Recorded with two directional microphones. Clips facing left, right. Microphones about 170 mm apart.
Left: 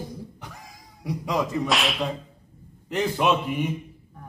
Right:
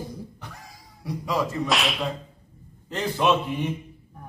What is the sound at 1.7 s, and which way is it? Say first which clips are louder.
Whip: even; centre (ahead or behind).